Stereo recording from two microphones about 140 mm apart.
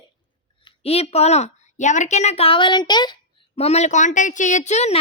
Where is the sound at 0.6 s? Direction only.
45° left (ahead or behind).